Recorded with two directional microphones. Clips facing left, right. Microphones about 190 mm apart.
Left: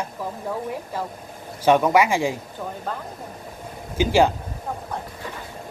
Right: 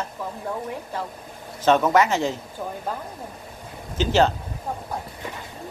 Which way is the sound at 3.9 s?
10° left (ahead or behind).